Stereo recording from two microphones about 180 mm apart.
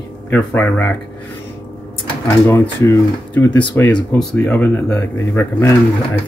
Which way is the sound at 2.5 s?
15° left (ahead or behind).